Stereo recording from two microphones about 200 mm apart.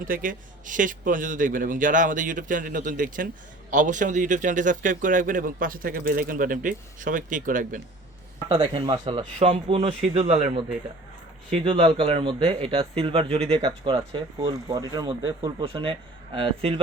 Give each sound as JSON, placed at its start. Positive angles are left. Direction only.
{"t": 0.0, "sound": "a man's voice", "side_deg": -45}
{"t": 8.4, "sound": "a man's voice", "side_deg": -30}